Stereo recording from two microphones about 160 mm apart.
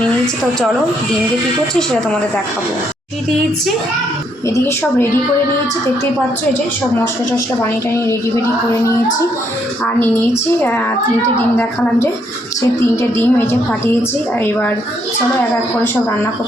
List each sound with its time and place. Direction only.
4.4 s a woman's voice: 15° left (ahead or behind)
9.8 s a woman's voice: 10° left (ahead or behind)
12.6 s a woman's voice: 15° left (ahead or behind)